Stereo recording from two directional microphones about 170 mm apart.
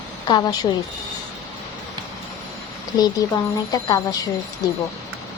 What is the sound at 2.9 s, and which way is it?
Speech, 25° left (ahead or behind).